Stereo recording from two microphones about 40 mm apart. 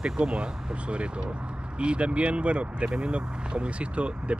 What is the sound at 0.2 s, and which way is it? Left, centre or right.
Speech, right.